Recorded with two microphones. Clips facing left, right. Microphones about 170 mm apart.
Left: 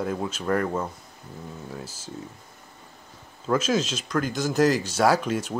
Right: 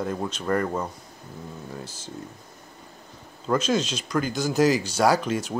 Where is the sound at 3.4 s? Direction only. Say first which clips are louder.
Even; 5° left (ahead or behind).